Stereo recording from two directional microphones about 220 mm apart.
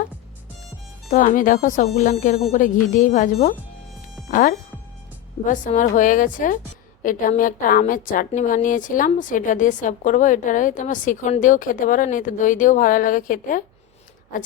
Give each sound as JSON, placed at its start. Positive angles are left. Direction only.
{"t": 1.1, "sound": "a woman's voice", "side_deg": 35}